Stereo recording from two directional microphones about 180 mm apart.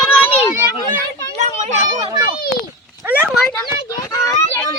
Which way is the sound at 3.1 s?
10° right (ahead or behind).